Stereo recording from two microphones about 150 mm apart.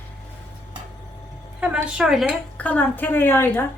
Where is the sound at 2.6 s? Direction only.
10° left (ahead or behind).